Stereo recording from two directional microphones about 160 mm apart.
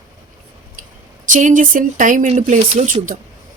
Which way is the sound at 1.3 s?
55° right (ahead or behind).